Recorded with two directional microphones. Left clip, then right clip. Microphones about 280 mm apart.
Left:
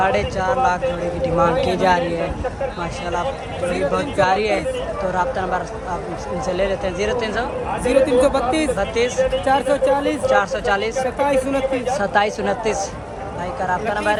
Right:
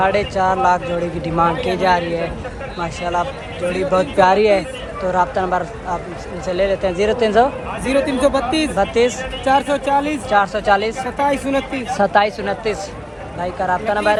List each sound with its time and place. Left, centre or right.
0.0 s speech: centre
7.9 s speech: centre
8.7 s speech: centre
9.5 s speech: centre
10.2 s speech: centre
11.9 s speech: centre